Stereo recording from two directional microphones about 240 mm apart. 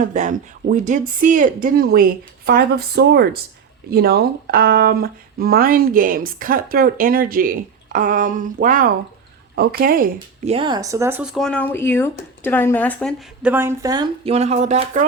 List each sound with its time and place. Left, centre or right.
0.0 s speech: right
10.5 s speech: centre